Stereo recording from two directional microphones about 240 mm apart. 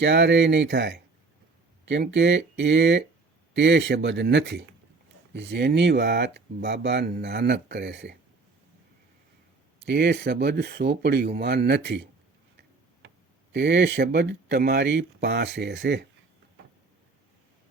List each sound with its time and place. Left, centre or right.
0.0 s speech: right
9.8 s speech: right
13.5 s speech: right